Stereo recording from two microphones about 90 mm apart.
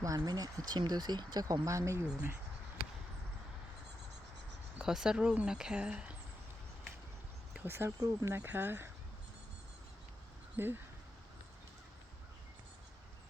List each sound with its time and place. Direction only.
0.0 s speech: 40° right (ahead or behind)
4.8 s speech: 5° right (ahead or behind)
7.5 s speech: 25° right (ahead or behind)
7.9 s speech: 40° right (ahead or behind)
8.3 s speech: 25° right (ahead or behind)
10.6 s speech: 20° right (ahead or behind)